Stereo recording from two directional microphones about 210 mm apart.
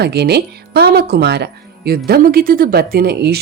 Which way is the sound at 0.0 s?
50° right (ahead or behind).